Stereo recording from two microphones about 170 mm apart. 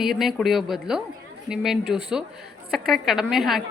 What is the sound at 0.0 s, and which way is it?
A woman's voice, centre (ahead or behind).